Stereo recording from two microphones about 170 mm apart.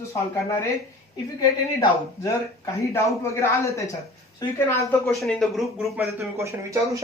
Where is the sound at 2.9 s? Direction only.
15° left (ahead or behind).